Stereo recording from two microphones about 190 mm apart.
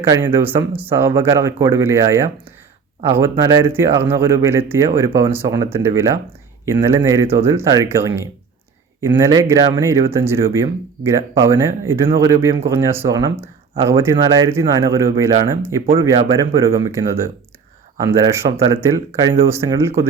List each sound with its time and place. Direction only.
0.0 s speech: 15° right (ahead or behind)
16.1 s speech: 30° right (ahead or behind)
16.6 s speech: 15° right (ahead or behind)
18.4 s speech: 30° right (ahead or behind)
18.7 s speech: 15° right (ahead or behind)